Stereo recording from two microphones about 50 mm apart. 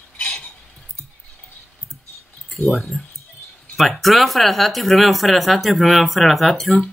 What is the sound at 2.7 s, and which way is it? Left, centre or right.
Speech, centre.